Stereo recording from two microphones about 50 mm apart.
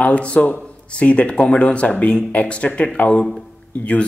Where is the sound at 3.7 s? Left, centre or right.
Left.